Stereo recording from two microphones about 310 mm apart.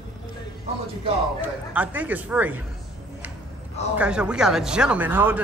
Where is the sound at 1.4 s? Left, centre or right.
Centre.